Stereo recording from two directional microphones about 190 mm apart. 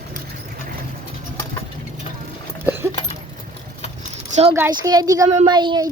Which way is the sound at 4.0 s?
40° right (ahead or behind).